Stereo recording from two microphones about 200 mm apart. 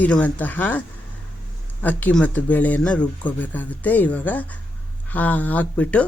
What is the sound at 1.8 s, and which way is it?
Speech, 10° left (ahead or behind).